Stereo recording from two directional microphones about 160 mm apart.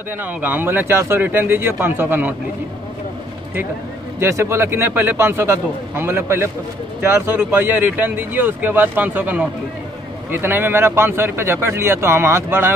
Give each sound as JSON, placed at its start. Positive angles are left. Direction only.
{"t": 0.2, "sound": "speech", "side_deg": -10}
{"t": 4.2, "sound": "speech", "side_deg": -15}